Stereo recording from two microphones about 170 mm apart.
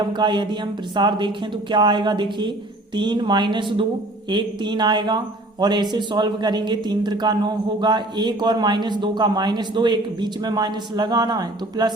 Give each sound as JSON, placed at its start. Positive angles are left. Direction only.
{"t": 0.0, "sound": "speech", "side_deg": -25}